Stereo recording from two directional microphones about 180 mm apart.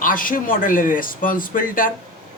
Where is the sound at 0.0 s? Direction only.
50° left (ahead or behind).